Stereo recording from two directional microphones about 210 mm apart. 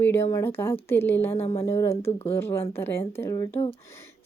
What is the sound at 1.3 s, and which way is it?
Speech, 25° left (ahead or behind).